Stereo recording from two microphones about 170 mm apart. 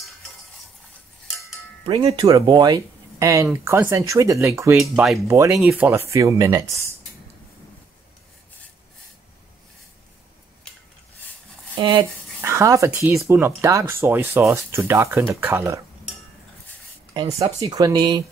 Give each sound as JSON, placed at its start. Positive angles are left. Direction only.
{"t": 1.9, "sound": "speech", "side_deg": -30}
{"t": 4.7, "sound": "speech", "side_deg": 0}
{"t": 5.3, "sound": "speech", "side_deg": -15}
{"t": 12.0, "sound": "speech", "side_deg": -15}
{"t": 17.6, "sound": "speech", "side_deg": -20}